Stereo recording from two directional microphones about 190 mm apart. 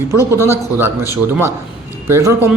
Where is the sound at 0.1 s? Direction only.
15° right (ahead or behind).